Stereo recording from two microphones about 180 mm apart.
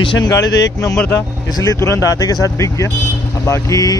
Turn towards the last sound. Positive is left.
turn(degrees=20)  # may be behind; listen again after turning